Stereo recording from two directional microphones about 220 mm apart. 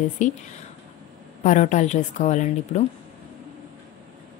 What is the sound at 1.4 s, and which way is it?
Speech, 35° left (ahead or behind).